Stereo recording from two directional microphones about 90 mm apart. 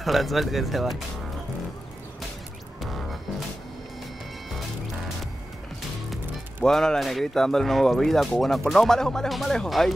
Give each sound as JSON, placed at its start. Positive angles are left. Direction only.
{"t": 0.0, "sound": "speech", "side_deg": 0}
{"t": 2.8, "sound": "music", "side_deg": 0}
{"t": 4.5, "sound": "music", "side_deg": 0}
{"t": 6.6, "sound": "speech", "side_deg": 5}